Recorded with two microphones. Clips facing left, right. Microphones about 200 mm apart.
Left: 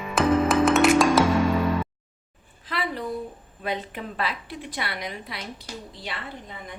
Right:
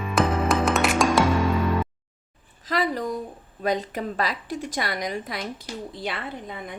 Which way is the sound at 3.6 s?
40° right (ahead or behind).